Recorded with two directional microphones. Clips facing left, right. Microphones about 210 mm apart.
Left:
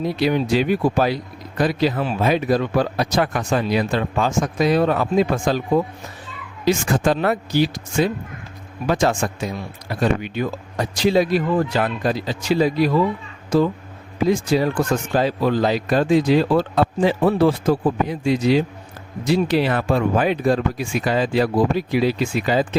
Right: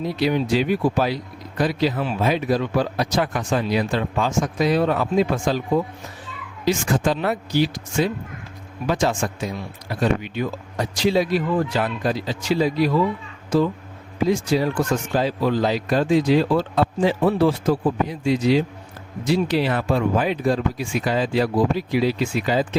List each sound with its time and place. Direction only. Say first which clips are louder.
0.2 s speech: left 1 dB; 55° left (ahead or behind)
14.3 s speech: left 2 dB; 55° left (ahead or behind)